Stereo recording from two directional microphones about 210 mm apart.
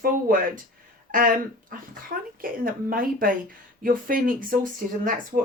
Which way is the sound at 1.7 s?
40° right (ahead or behind).